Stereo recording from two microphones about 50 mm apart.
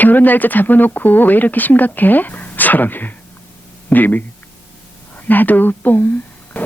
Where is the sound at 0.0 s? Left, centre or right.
Left.